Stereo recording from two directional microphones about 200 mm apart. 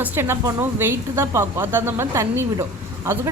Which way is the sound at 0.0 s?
10° right (ahead or behind).